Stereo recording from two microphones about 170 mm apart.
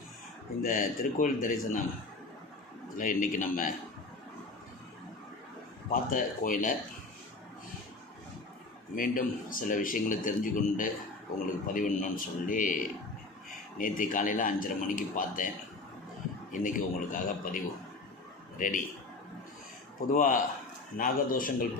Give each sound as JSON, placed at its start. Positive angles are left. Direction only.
{"t": 0.6, "sound": "speech", "side_deg": 50}
{"t": 3.0, "sound": "speech", "side_deg": 50}
{"t": 5.9, "sound": "speech", "side_deg": 55}
{"t": 9.0, "sound": "speech", "side_deg": 55}
{"t": 16.5, "sound": "a man's voice", "side_deg": 50}
{"t": 20.1, "sound": "a man's voice", "side_deg": 50}